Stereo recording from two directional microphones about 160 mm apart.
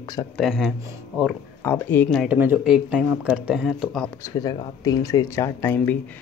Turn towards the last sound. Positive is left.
turn(degrees=10)  # may be behind; listen again after turning